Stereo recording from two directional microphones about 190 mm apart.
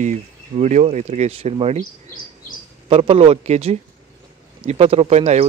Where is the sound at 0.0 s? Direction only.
40° right (ahead or behind).